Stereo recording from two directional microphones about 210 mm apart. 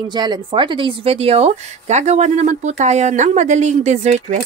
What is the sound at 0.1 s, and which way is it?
A woman's voice, 20° right (ahead or behind).